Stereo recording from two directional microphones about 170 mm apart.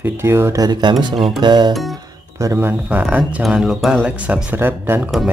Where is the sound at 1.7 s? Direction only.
Centre (ahead or behind).